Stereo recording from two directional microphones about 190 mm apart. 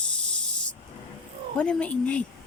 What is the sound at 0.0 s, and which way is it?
Snake, 5° left (ahead or behind).